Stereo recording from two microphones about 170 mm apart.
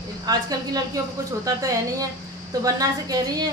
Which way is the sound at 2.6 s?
20° right (ahead or behind).